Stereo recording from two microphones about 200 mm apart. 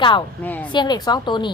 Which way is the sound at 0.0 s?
25° left (ahead or behind).